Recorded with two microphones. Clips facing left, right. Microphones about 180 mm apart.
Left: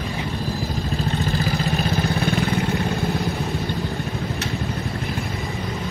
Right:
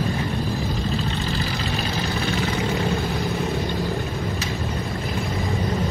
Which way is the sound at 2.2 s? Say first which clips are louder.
Left 2 dB; 55° left (ahead or behind).